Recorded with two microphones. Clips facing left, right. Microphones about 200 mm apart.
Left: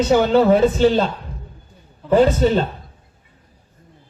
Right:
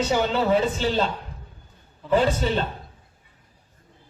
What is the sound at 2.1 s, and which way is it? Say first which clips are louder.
Speech: left 7 dB; 45° left (ahead or behind).